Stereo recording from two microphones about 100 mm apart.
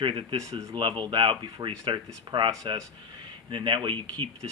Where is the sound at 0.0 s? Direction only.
60° right (ahead or behind).